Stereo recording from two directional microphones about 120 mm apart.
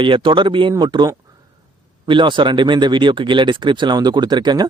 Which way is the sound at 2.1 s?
40° right (ahead or behind).